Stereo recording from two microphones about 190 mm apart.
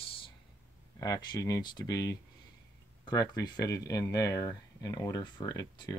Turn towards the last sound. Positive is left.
turn(degrees=20)  # may be behind; listen again after turning